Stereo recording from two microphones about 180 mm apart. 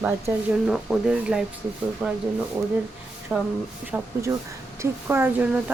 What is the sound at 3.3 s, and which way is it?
Speech, 10° right (ahead or behind).